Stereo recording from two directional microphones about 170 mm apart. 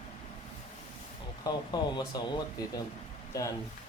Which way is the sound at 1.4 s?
25° left (ahead or behind).